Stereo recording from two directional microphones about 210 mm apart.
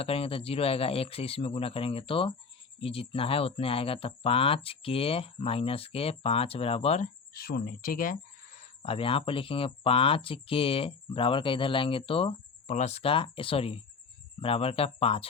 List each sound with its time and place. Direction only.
0.0 s speech: 25° left (ahead or behind)
7.3 s speech: 45° left (ahead or behind)
8.8 s speech: 25° left (ahead or behind)